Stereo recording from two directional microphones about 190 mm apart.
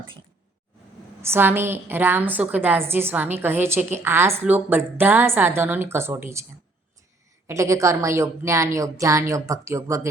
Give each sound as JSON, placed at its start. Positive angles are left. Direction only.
{"t": 1.2, "sound": "a woman's voice", "side_deg": -10}
{"t": 7.4, "sound": "a woman's voice", "side_deg": -15}